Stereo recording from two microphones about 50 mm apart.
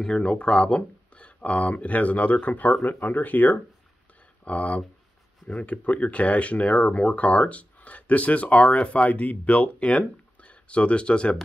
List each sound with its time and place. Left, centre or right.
0.0 s speech: centre